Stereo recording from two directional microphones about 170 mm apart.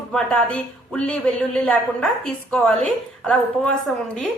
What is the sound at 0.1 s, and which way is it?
A woman's voice, 5° left (ahead or behind).